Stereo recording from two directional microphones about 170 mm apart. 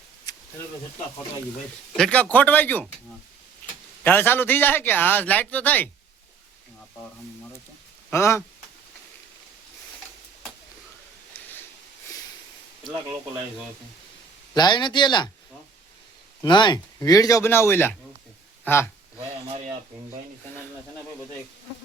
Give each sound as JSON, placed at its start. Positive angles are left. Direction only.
{"t": 0.3, "sound": "a sound", "side_deg": 25}
{"t": 2.0, "sound": "a man's voice", "side_deg": 5}
{"t": 4.0, "sound": "a man's voice", "side_deg": 10}
{"t": 8.1, "sound": "a man's voice", "side_deg": 15}
{"t": 11.3, "sound": "a sound", "side_deg": 10}
{"t": 14.5, "sound": "speech", "side_deg": 25}
{"t": 16.4, "sound": "speech", "side_deg": 25}